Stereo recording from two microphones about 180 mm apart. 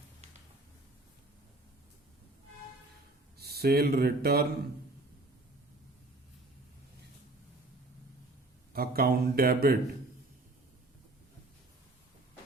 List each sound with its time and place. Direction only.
3.4 s speech: 60° right (ahead or behind)
8.7 s speech: 55° right (ahead or behind)